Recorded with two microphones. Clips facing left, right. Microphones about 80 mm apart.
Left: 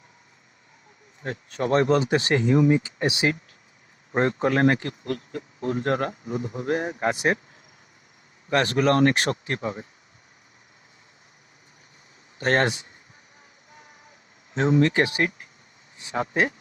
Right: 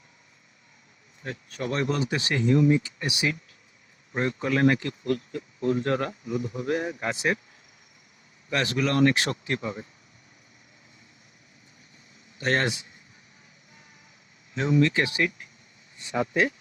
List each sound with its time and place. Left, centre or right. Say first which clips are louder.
1.2 s speech: left 5 dB; left
4.1 s speech: left 4 dB; left
8.4 s speech: left 5 dB; left
12.4 s speech: left 4 dB; left
14.5 s speech: left 3 dB; left